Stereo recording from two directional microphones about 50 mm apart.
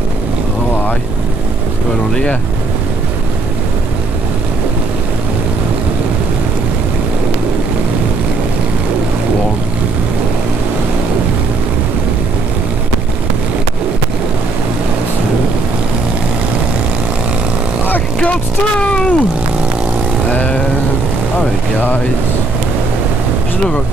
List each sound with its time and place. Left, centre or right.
18.8 s cat: left
20.3 s vehicle: left